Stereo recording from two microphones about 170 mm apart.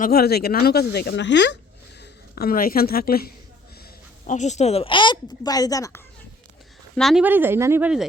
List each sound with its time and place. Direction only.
0.0 s speech: 65° left (ahead or behind); by 1.5 s 90° left
2.0 s a woman's voice: 65° left (ahead or behind)
4.3 s a woman's voice: 45° left (ahead or behind); by 6.0 s 20° left (ahead or behind)
6.9 s a woman's voice: centre (ahead or behind)
7.3 s speech: 10° right (ahead or behind)